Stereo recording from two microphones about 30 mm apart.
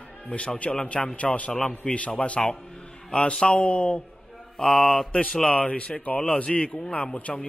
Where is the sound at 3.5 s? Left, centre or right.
Left.